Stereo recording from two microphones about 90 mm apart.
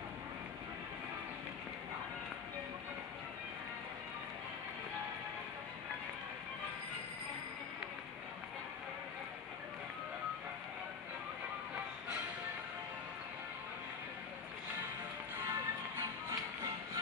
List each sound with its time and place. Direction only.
15.3 s music: 25° right (ahead or behind)